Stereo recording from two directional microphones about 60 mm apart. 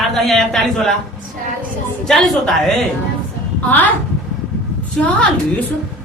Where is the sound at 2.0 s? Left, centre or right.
Centre.